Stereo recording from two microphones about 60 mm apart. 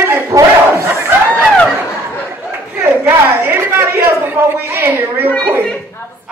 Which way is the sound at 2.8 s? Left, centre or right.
Right.